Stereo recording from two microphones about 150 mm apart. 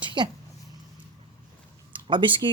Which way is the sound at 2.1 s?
30° right (ahead or behind).